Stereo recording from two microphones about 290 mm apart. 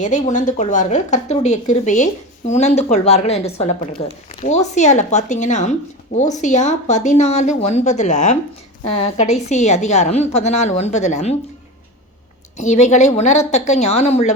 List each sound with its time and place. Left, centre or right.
0.0 s a woman's voice: left
12.5 s a woman's voice: left